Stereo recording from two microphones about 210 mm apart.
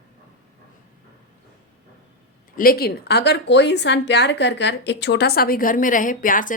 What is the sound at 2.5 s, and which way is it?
A woman's voice, 45° left (ahead or behind).